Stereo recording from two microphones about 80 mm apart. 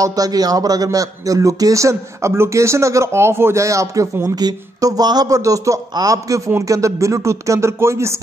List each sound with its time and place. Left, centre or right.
0.0 s speech: right